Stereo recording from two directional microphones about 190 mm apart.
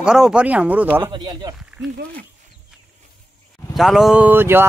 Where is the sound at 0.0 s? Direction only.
5° right (ahead or behind).